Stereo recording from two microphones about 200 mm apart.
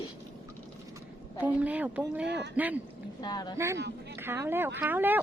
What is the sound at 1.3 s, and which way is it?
Speech, 5° right (ahead or behind).